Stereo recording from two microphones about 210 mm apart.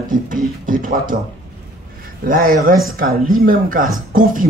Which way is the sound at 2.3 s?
40° right (ahead or behind).